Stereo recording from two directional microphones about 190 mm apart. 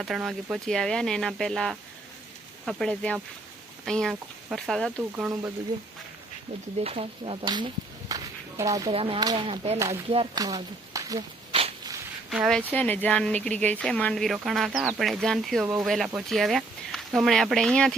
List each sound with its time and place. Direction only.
0.0 s speech: centre (ahead or behind)
5.1 s speech: 10° right (ahead or behind)
6.8 s speech: 30° right (ahead or behind)
9.0 s speech: 30° right (ahead or behind)
9.7 s speech: 15° right (ahead or behind)
11.5 s a sound: 30° right (ahead or behind)
12.3 s speech: centre (ahead or behind)